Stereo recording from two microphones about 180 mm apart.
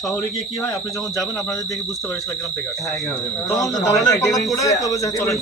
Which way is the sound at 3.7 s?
20° left (ahead or behind).